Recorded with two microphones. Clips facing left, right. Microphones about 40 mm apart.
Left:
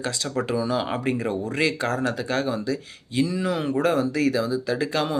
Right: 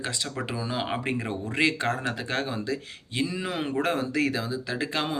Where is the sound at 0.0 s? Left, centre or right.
Right.